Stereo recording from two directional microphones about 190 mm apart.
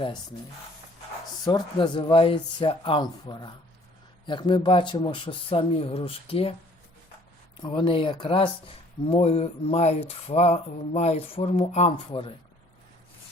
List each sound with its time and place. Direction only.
1.5 s speech: 20° left (ahead or behind)
7.5 s speech: 25° left (ahead or behind)